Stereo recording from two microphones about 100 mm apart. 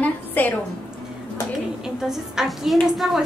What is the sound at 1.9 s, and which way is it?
A woman's voice, 5° right (ahead or behind).